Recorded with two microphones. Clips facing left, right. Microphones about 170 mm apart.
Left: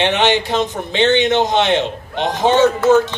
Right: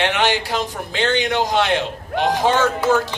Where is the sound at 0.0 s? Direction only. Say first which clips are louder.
Left 4 dB; 20° left (ahead or behind).